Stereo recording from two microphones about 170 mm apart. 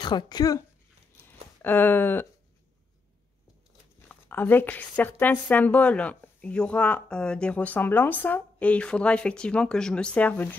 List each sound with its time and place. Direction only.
0.0 s speech: 25° left (ahead or behind)
1.6 s speech: 10° left (ahead or behind)
4.1 s speech: 10° left (ahead or behind)